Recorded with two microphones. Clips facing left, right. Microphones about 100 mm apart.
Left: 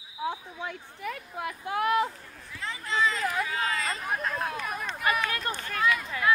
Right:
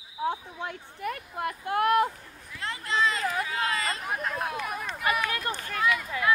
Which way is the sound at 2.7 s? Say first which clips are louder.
Right 1 dB; 70° right (ahead or behind).